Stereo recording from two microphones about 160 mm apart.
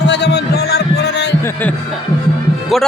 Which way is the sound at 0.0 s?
90° left.